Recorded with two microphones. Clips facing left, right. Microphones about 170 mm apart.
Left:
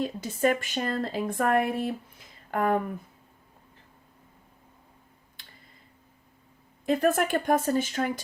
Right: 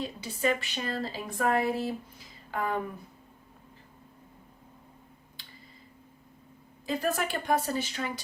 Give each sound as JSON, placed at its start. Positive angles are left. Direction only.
{"t": 0.0, "sound": "speech", "side_deg": 50}
{"t": 6.8, "sound": "speech", "side_deg": 55}